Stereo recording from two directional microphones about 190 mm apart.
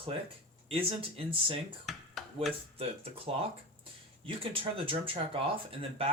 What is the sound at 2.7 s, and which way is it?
Speech, 30° right (ahead or behind).